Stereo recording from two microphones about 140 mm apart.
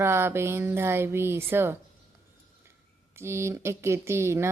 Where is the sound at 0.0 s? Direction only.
20° right (ahead or behind).